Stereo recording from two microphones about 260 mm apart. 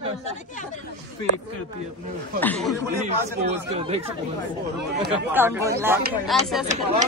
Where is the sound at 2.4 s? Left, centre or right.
Centre.